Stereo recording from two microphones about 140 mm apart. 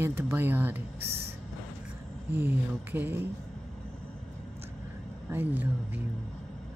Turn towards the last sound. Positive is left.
turn(degrees=-10)  # may be behind; listen again after turning